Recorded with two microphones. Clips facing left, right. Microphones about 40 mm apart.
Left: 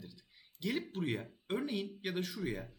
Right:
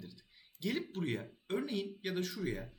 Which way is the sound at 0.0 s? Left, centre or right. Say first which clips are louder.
Right 1 dB; centre.